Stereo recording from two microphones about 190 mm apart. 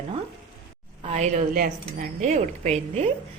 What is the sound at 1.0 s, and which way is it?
A woman's voice, 35° right (ahead or behind).